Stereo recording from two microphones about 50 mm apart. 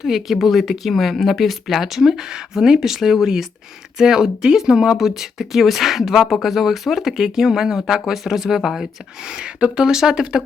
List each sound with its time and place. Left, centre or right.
0.0 s speech: centre
9.4 s speech: centre